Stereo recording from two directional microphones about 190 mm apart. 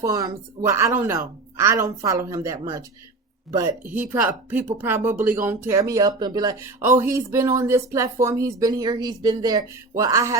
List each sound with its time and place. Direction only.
0.0 s speech: 15° right (ahead or behind)